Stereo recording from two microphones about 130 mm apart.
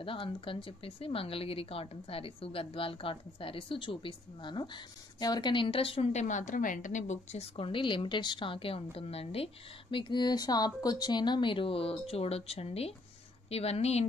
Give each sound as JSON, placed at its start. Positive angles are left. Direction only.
{"t": 0.0, "sound": "speech", "side_deg": 45}
{"t": 6.2, "sound": "a woman's voice", "side_deg": 70}
{"t": 7.5, "sound": "a woman's voice", "side_deg": 40}